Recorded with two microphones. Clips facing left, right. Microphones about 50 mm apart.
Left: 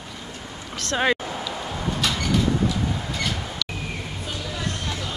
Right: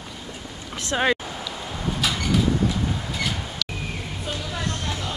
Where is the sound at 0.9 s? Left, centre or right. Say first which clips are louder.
Even; centre.